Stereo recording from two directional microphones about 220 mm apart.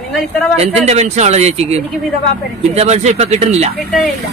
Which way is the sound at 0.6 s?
30° right (ahead or behind).